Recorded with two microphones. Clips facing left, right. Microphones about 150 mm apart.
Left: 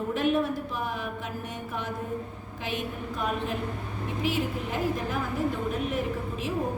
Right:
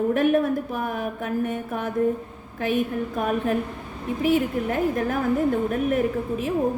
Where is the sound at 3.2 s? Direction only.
50° right (ahead or behind).